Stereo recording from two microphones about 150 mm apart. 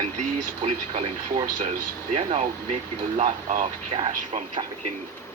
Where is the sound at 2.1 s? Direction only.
45° right (ahead or behind).